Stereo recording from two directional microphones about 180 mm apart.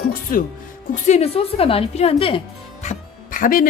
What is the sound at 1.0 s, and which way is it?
A woman's voice, 35° left (ahead or behind).